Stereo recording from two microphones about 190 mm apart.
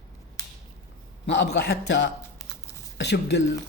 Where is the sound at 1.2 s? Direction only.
65° left (ahead or behind).